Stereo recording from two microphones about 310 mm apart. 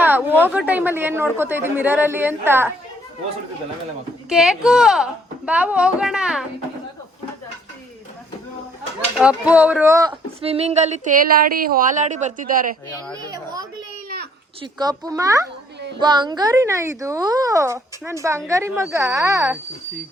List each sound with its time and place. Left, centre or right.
0.0 s speech: centre
4.3 s speech: centre
9.1 s speech: centre; by 12.7 s right
13.2 s speech: centre